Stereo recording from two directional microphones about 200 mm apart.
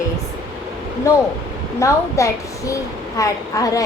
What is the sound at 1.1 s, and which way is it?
A woman's voice, 15° left (ahead or behind).